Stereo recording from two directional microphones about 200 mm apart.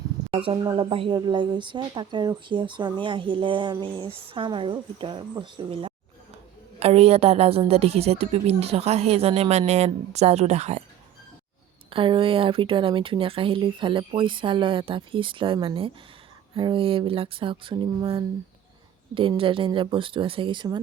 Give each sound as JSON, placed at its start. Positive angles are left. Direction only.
{"t": 0.3, "sound": "a woman's voice", "side_deg": -30}
{"t": 11.9, "sound": "speech", "side_deg": -25}